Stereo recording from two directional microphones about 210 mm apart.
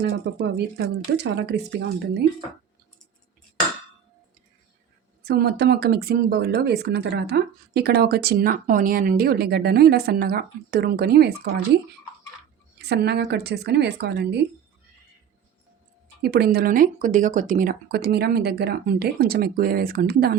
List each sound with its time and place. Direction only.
0.0 s speech: 55° right (ahead or behind)
5.2 s speech: 50° right (ahead or behind)
12.9 s speech: 50° right (ahead or behind)
16.2 s speech: 50° right (ahead or behind)